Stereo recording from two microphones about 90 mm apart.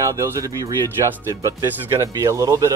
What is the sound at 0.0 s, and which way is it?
Speech, 40° right (ahead or behind).